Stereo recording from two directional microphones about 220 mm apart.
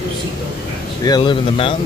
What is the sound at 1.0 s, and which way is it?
Speech, 20° left (ahead or behind).